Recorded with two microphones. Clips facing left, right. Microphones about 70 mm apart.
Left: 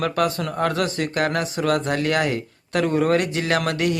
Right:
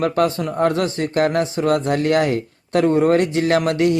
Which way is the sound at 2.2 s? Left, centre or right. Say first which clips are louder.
Right 4 dB; right.